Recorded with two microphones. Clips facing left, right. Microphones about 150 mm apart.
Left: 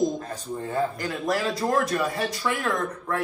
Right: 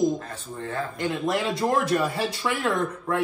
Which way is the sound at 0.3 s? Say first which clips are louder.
Left 2 dB; 5° left (ahead or behind).